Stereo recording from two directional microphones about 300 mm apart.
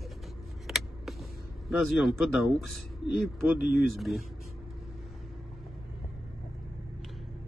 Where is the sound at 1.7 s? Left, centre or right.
Centre.